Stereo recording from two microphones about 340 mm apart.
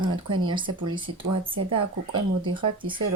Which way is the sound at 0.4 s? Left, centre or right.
Centre.